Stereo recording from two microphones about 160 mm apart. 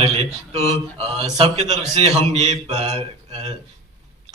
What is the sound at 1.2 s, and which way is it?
A man's voice, 40° right (ahead or behind).